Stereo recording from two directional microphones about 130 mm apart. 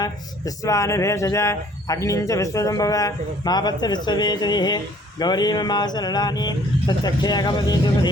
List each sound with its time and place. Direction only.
0.0 s speech: 25° left (ahead or behind)